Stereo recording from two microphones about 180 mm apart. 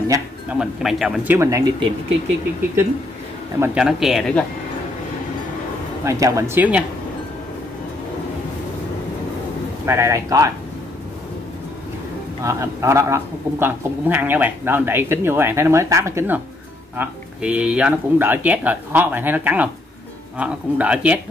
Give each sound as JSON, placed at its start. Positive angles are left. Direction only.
{"t": 0.5, "sound": "speech", "side_deg": 0}
{"t": 1.3, "sound": "a man's voice", "side_deg": -15}
{"t": 3.5, "sound": "a man's voice", "side_deg": -15}
{"t": 3.8, "sound": "speech", "side_deg": 0}
{"t": 6.0, "sound": "a man's voice", "side_deg": -15}
{"t": 9.8, "sound": "a man's voice", "side_deg": -15}
{"t": 12.4, "sound": "a man's voice", "side_deg": -15}